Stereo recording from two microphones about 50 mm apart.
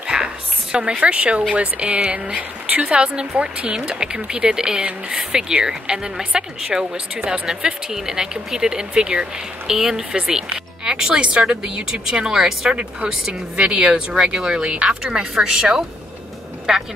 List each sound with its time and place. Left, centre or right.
0.0 s a sound: centre
1.5 s speech: right; by 12.7 s centre
13.2 s speech: centre